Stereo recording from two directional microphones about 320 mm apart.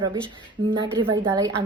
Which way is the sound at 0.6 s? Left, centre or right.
Right.